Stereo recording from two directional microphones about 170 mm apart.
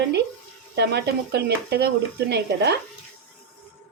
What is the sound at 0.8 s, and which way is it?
A woman's voice, 75° right (ahead or behind).